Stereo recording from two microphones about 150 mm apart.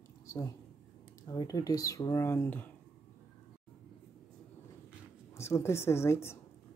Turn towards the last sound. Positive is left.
turn(degrees=15)  # may be behind; listen again after turning